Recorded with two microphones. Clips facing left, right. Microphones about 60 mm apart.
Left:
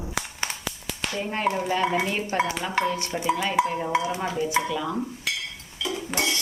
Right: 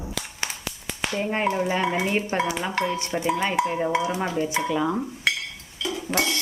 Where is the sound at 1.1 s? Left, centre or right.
Right.